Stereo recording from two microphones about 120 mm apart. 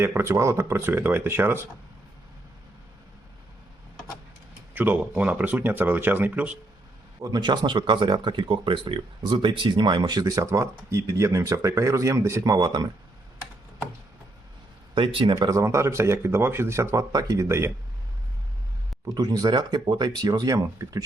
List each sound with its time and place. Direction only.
0.0 s speech: 20° right (ahead or behind)
4.7 s speech: 15° right (ahead or behind)
7.2 s speech: 30° right (ahead or behind)
14.9 s speech: 45° right (ahead or behind)
15.4 s speech: 30° right (ahead or behind)
19.1 s speech: 30° right (ahead or behind)